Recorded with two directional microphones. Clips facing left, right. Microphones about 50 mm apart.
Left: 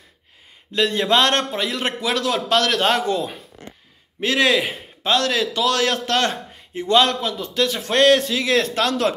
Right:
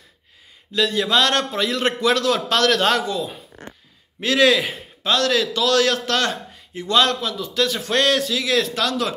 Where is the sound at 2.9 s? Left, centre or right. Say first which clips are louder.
Left 1 dB; left.